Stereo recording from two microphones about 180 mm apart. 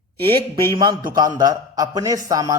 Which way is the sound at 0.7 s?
25° right (ahead or behind).